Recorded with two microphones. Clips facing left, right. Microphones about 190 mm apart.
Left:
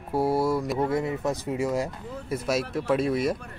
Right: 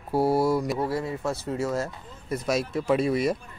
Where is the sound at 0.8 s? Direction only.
20° left (ahead or behind).